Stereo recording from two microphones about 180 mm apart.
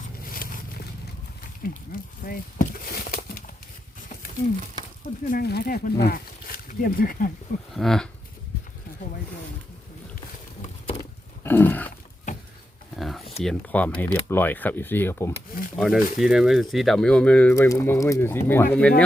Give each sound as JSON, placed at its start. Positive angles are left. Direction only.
{"t": 0.3, "sound": "a sound", "side_deg": 55}
{"t": 1.6, "sound": "speech", "side_deg": 55}
{"t": 5.3, "sound": "speech", "side_deg": 60}
{"t": 7.7, "sound": "livestock", "side_deg": 0}
{"t": 11.4, "sound": "a sound", "side_deg": 10}
{"t": 13.0, "sound": "a sound", "side_deg": 0}
{"t": 13.4, "sound": "speech", "side_deg": 5}
{"t": 15.7, "sound": "livestock", "side_deg": 0}
{"t": 16.2, "sound": "speech", "side_deg": 0}